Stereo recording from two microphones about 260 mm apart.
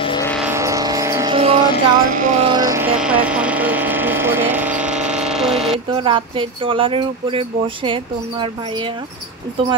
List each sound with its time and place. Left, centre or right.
0.0 s vehicle: centre
0.5 s music: centre
5.9 s speech: centre